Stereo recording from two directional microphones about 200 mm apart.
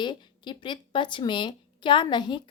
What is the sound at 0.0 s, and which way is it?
Speech, 25° left (ahead or behind).